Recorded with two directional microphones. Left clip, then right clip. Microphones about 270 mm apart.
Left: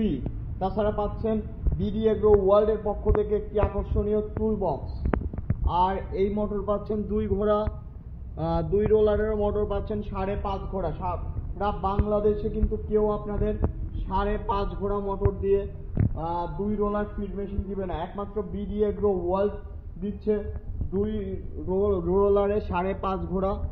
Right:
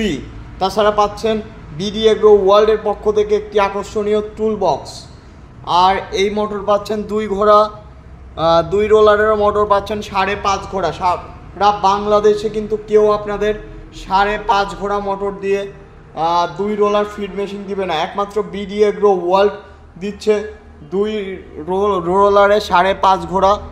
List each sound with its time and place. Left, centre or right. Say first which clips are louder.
0.6 s a man's voice: right 13 dB; right
21.6 s a man's voice: right 9 dB; right